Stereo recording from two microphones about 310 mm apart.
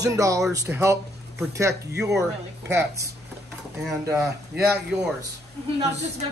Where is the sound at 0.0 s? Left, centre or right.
Centre.